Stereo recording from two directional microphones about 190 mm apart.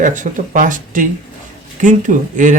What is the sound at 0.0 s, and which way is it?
Speech, 40° right (ahead or behind).